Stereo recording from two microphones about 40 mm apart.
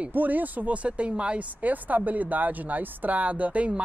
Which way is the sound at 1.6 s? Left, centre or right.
Right.